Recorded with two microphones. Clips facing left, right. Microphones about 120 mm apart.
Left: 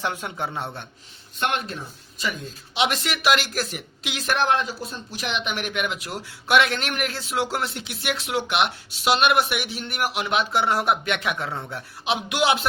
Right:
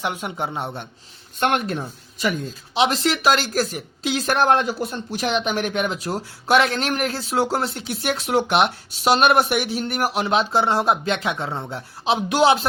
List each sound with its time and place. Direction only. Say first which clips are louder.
0.0 s speech: right 2 dB; 20° right (ahead or behind)
1.4 s speech: right 5 dB; 50° right (ahead or behind)
2.7 s speech: right 5 dB; 35° right (ahead or behind)
4.8 s speech: right 7 dB; 60° right (ahead or behind)
5.2 s speech: right 6 dB; 40° right (ahead or behind)